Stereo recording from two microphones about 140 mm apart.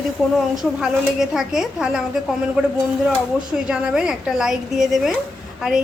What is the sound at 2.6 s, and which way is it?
Speech, 10° right (ahead or behind).